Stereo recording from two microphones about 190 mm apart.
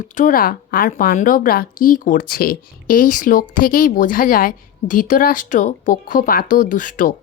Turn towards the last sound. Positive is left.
turn(degrees=45)  # may be behind; listen again after turning